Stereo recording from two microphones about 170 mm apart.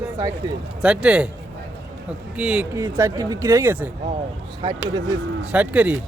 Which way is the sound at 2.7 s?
20° right (ahead or behind).